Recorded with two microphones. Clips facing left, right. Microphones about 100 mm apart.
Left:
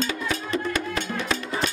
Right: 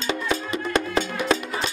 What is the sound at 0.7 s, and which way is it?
Music, 30° right (ahead or behind).